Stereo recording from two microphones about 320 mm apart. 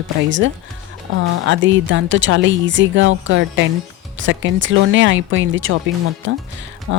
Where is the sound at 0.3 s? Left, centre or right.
Right.